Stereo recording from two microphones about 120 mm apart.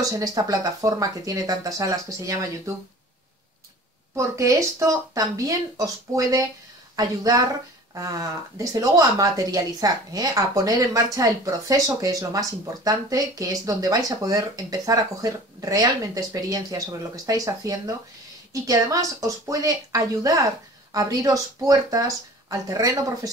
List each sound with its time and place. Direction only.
0.0 s speech: 30° right (ahead or behind)
4.1 s speech: 25° right (ahead or behind)